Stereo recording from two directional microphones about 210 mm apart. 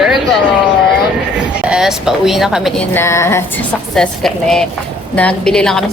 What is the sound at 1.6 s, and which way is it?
A woman's voice, 5° right (ahead or behind).